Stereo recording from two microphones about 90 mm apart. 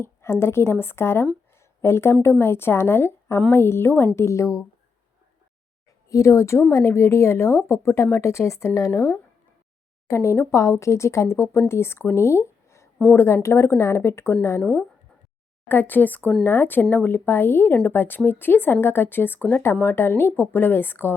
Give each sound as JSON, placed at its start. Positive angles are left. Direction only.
{"t": 0.0, "sound": "a woman's voice", "side_deg": 30}
{"t": 6.1, "sound": "a woman's voice", "side_deg": 35}
{"t": 14.6, "sound": "speech", "side_deg": 10}
{"t": 15.7, "sound": "a woman's voice", "side_deg": 20}